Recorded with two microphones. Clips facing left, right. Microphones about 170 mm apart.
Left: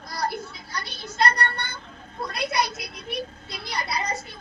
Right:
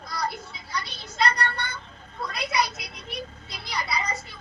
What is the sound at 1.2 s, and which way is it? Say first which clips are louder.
A woman's voice: left 1 dB; 55° left (ahead or behind).